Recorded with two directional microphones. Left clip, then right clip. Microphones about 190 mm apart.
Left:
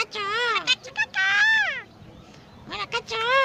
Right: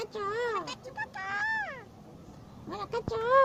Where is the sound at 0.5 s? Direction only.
Centre (ahead or behind).